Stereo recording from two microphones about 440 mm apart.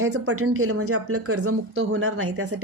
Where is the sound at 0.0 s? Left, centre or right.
Right.